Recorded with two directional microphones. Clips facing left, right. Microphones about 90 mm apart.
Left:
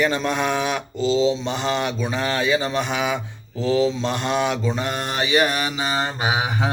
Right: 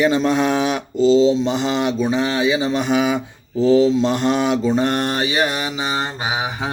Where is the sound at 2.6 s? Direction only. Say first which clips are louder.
Right 5 dB; 30° right (ahead or behind).